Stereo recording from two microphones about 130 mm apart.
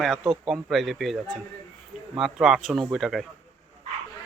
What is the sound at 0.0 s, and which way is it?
Speech, centre (ahead or behind).